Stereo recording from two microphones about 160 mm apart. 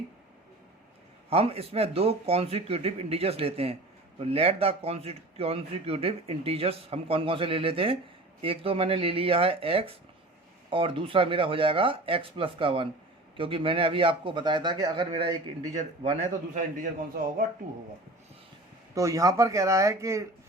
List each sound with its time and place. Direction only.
1.3 s a man's voice: 35° right (ahead or behind)
16.2 s a man's voice: 50° right (ahead or behind)
18.9 s speech: 20° right (ahead or behind)